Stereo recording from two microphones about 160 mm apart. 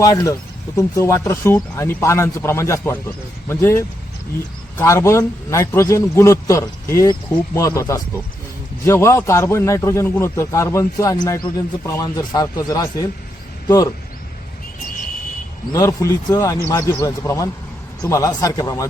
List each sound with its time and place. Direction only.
0.0 s a man's voice: 20° left (ahead or behind)
15.7 s speech: 20° left (ahead or behind)